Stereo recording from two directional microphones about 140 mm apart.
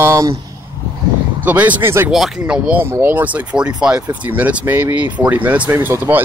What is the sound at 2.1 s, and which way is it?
Speech, 5° right (ahead or behind).